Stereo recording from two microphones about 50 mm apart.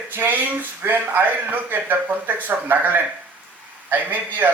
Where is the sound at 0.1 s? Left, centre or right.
Right.